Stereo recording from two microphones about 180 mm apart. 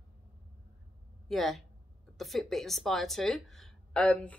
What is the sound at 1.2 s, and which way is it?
Speech, centre (ahead or behind).